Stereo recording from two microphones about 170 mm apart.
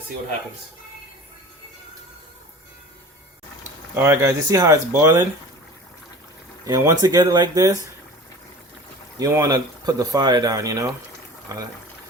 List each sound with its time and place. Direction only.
3.9 s speech: 15° right (ahead or behind)
6.7 s speech: 20° right (ahead or behind)
9.1 s speech: 20° right (ahead or behind)